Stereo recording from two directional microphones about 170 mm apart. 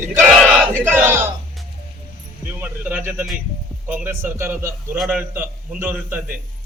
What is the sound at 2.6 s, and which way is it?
A man's voice, 10° right (ahead or behind).